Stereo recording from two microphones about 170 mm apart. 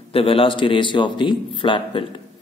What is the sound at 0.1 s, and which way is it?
Speech, 35° left (ahead or behind).